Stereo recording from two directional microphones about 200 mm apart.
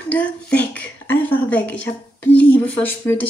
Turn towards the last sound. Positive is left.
turn(degrees=10)  # may be behind; listen again after turning